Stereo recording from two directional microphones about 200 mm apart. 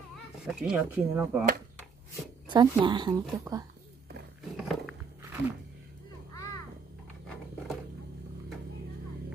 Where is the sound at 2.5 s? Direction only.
20° right (ahead or behind).